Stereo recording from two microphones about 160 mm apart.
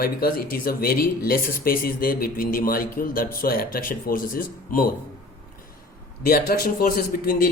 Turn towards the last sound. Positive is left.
turn(degrees=65)  # may be behind; listen again after turning